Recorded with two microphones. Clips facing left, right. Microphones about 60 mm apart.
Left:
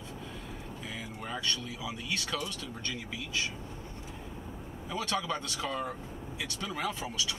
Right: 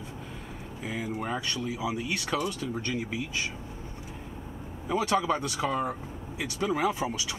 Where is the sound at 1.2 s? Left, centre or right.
Centre.